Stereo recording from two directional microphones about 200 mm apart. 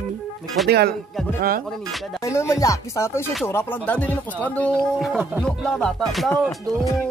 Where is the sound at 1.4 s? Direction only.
45° right (ahead or behind).